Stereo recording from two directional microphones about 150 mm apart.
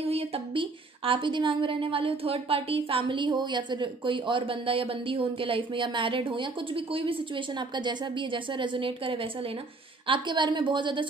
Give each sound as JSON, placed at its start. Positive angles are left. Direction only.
{"t": 0.0, "sound": "a woman's voice", "side_deg": -40}